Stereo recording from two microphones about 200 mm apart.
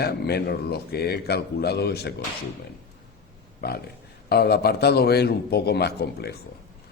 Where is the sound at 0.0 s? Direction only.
55° left (ahead or behind).